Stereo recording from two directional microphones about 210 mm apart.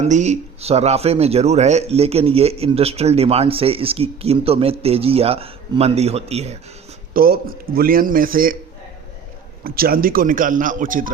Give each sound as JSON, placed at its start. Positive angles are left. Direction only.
{"t": 0.0, "sound": "speech", "side_deg": -35}
{"t": 7.1, "sound": "a man's voice", "side_deg": -45}
{"t": 9.6, "sound": "speech", "side_deg": -45}